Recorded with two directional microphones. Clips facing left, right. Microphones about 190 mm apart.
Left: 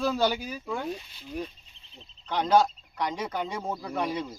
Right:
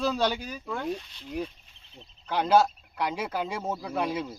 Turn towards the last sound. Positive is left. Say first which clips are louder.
# right 1 dB
turn(degrees=-5)  # may be behind; listen again after turning